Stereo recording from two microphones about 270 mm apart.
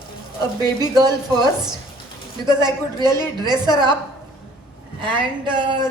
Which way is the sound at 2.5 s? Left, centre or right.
Centre.